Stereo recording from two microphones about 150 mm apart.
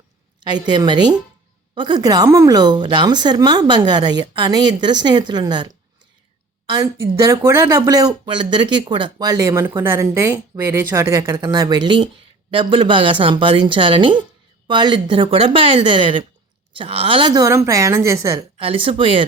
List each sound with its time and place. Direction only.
0.4 s a woman's voice: 30° right (ahead or behind)
18.5 s a woman's voice: 40° right (ahead or behind)